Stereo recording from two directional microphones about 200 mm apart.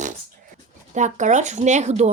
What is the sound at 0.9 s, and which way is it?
Speech, 35° right (ahead or behind).